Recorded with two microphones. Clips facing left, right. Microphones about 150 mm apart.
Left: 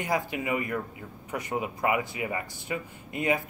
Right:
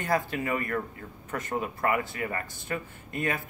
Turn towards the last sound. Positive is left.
turn(degrees=15)  # may be behind; listen again after turning